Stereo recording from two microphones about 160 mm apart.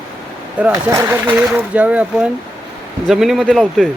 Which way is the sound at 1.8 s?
10° right (ahead or behind).